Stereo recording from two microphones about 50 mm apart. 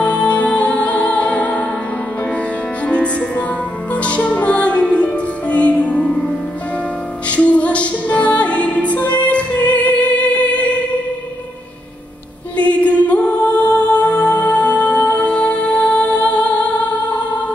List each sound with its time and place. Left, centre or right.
0.0 s music: left
2.9 s music: left
7.2 s music: left
12.5 s music: left